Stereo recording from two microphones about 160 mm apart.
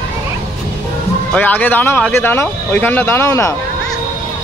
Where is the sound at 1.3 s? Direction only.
10° left (ahead or behind).